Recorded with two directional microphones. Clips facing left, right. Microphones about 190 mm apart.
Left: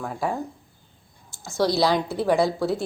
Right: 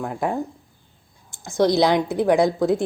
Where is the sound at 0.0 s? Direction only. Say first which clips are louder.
Right 3 dB; 15° right (ahead or behind).